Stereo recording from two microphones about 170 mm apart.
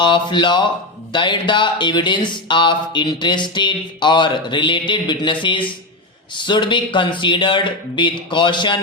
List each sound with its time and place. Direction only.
0.0 s speech: 25° left (ahead or behind)